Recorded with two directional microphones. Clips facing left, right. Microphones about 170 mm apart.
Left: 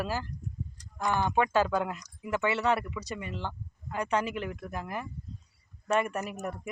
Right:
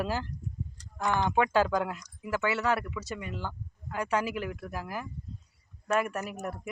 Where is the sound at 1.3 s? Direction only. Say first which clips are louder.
Right 1 dB; 10° right (ahead or behind).